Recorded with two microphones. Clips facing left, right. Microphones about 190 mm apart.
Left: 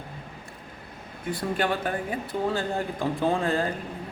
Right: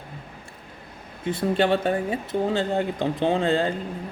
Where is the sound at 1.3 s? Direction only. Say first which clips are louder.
Right 6 dB; 25° right (ahead or behind).